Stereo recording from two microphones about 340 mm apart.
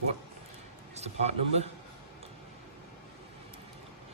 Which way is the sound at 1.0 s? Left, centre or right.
Centre.